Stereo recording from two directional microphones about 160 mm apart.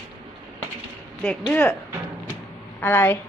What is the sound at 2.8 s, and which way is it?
Speech, 15° left (ahead or behind).